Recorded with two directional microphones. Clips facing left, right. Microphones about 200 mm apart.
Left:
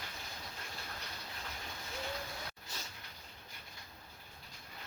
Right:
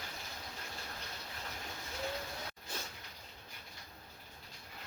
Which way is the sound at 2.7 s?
55° right (ahead or behind).